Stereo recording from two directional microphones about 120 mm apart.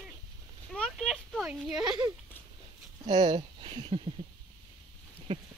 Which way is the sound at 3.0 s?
35° right (ahead or behind).